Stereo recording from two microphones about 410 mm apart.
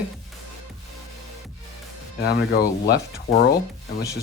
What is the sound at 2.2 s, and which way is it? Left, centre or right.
Speech, left.